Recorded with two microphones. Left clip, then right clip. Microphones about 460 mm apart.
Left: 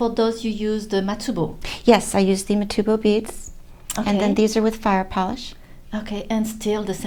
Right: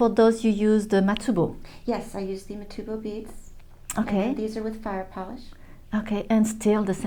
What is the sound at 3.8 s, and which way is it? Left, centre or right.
Speech, centre.